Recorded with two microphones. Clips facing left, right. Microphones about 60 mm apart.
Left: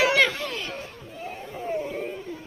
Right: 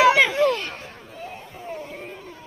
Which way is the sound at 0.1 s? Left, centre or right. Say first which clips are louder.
Right 3 dB; centre.